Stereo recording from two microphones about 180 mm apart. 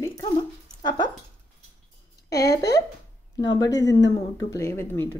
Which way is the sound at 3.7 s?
85° left.